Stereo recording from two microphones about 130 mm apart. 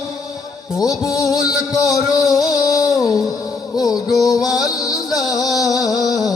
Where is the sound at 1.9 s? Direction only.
30° left (ahead or behind).